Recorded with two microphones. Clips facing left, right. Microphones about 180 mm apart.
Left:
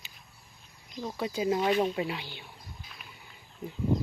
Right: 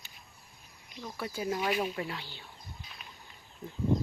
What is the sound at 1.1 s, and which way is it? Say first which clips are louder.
Speech: left 5 dB; 20° left (ahead or behind).